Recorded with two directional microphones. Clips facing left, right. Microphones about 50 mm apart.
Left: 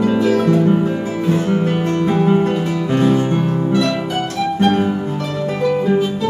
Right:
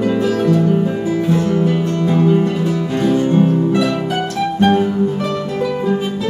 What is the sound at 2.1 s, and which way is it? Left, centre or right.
Music, left.